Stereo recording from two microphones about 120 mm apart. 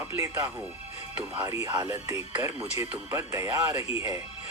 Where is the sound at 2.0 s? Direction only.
25° right (ahead or behind).